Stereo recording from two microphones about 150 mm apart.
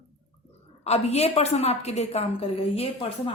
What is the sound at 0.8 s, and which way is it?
Speech, 45° left (ahead or behind).